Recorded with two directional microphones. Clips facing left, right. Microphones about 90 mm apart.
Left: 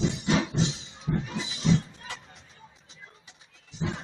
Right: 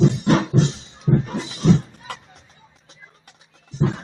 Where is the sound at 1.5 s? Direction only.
40° right (ahead or behind).